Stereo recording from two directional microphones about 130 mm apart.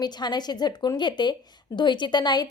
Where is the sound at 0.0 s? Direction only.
35° left (ahead or behind).